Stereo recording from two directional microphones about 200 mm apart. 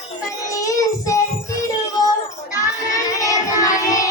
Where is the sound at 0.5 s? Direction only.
15° left (ahead or behind).